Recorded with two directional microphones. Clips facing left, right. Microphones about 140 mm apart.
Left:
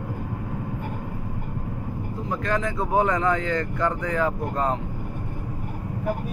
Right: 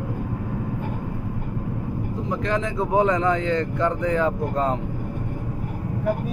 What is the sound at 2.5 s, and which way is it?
Speech, 20° right (ahead or behind).